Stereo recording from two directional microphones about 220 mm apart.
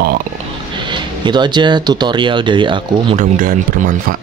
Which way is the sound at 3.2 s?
40° right (ahead or behind).